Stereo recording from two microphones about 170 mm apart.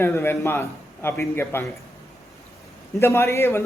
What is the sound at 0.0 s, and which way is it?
A man's voice, 15° left (ahead or behind).